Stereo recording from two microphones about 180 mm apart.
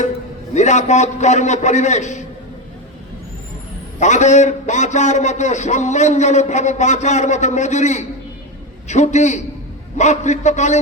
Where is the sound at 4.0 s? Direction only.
40° left (ahead or behind).